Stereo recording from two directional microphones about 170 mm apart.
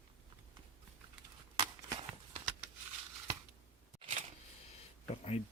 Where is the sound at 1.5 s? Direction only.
35° right (ahead or behind).